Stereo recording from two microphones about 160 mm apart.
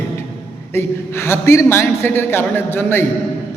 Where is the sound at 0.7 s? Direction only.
15° left (ahead or behind).